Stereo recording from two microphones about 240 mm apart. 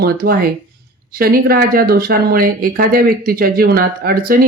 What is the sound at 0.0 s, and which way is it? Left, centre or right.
Speech, right.